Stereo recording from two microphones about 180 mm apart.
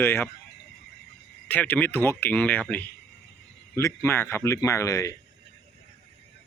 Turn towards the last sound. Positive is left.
turn(degrees=15)  # may be behind; listen again after turning